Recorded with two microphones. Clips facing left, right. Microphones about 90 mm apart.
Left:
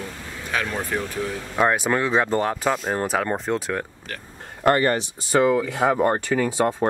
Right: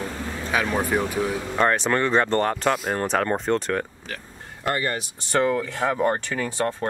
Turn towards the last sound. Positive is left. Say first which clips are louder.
# left 4 dB
turn(degrees=15)  # may be behind; listen again after turning